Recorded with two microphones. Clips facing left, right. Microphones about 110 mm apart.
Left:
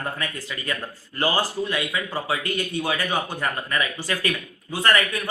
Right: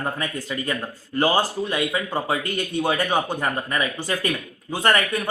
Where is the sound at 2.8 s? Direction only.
25° right (ahead or behind).